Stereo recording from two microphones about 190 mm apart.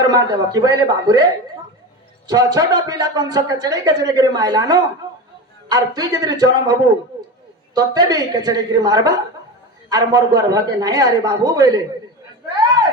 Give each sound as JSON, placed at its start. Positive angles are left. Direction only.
{"t": 0.1, "sound": "speech", "side_deg": -20}